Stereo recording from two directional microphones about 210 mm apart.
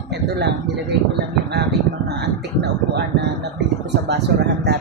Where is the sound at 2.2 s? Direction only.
55° right (ahead or behind).